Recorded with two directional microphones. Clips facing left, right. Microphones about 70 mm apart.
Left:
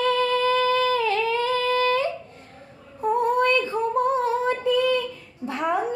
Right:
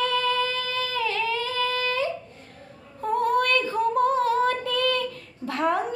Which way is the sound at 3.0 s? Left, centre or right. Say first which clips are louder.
Left 2 dB; left.